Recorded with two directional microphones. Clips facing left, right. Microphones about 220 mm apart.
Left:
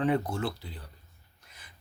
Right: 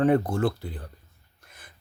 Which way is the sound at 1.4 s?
50° right (ahead or behind).